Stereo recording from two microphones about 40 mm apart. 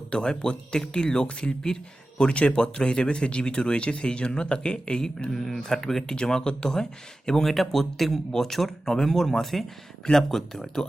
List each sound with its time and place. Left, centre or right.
0.1 s speech: left